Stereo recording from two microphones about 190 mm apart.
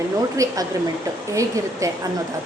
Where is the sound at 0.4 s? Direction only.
15° right (ahead or behind).